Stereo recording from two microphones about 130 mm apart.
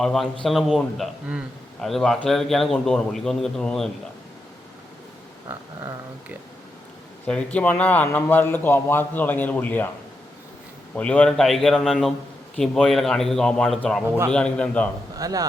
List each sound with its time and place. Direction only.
0.0 s a man's voice: centre (ahead or behind)
5.5 s speech: 20° right (ahead or behind)
7.3 s a man's voice: 10° left (ahead or behind)
10.9 s a man's voice: 10° left (ahead or behind)
15.2 s speech: 30° right (ahead or behind)